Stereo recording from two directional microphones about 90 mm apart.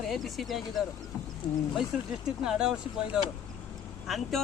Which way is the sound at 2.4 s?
10° right (ahead or behind).